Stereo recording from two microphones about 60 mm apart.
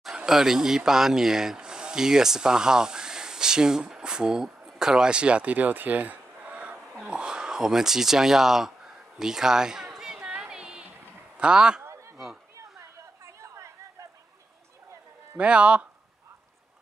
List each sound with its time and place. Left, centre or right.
0.0 s speech: centre
9.9 s a sound: centre
10.2 s a sound: centre
11.3 s a man's voice: centre
12.2 s chatter: centre
12.5 s chatter: right
15.3 s speech: right